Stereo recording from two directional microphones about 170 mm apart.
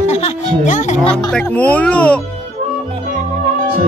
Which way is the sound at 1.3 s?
5° left (ahead or behind).